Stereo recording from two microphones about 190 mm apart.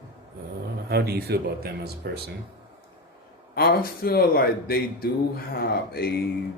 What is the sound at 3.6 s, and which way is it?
Speech, 50° left (ahead or behind).